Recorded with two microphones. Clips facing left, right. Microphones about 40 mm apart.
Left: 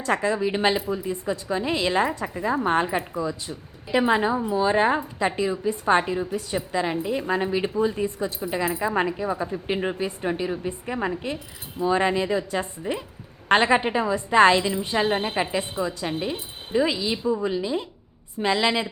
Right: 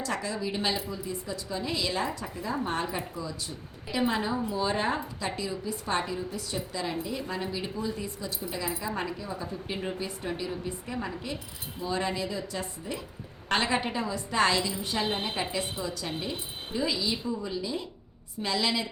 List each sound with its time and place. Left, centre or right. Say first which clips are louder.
0.0 s a woman's voice: left 9 dB; left